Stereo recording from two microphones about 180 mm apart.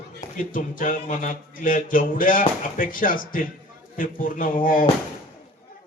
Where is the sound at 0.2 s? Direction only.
50° left (ahead or behind).